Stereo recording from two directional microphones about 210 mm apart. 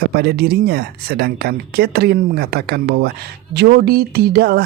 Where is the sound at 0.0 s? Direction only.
50° right (ahead or behind).